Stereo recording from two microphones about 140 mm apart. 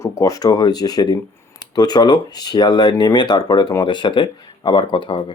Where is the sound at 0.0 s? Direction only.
20° left (ahead or behind).